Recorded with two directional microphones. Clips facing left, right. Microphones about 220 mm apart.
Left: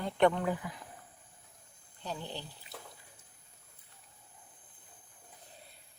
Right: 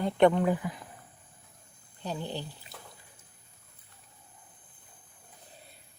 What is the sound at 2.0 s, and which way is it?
Speech, 15° right (ahead or behind).